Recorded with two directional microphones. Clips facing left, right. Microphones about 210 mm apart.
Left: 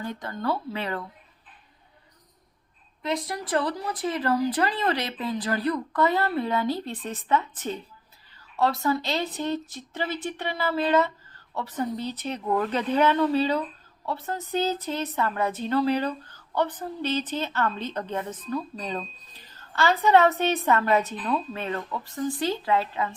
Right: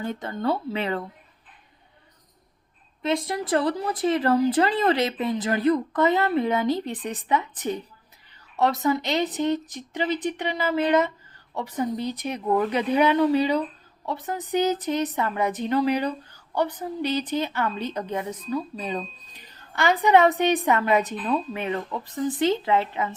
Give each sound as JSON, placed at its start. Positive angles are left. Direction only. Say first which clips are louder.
{"t": 0.0, "sound": "speech", "louder": "right 3 dB", "side_deg": -25}
{"t": 3.0, "sound": "a woman's voice", "louder": "right 4 dB", "side_deg": -25}